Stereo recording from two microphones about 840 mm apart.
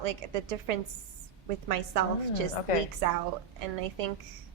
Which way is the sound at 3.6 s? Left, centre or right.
Right.